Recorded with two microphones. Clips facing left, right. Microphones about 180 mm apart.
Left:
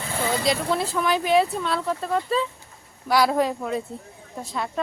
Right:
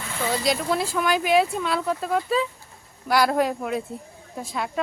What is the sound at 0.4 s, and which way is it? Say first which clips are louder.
Speech: right 1 dB; 5° right (ahead or behind).